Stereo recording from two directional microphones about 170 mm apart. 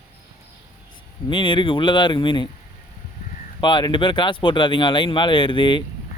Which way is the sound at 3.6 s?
25° left (ahead or behind).